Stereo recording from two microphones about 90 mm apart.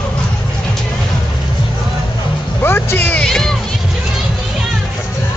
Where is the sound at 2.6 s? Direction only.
25° left (ahead or behind).